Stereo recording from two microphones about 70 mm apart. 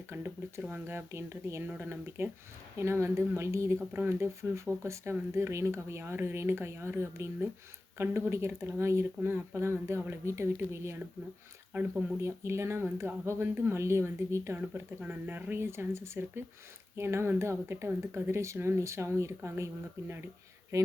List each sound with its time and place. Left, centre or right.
0.1 s speech: right
2.7 s speech: right
14.6 s speech: right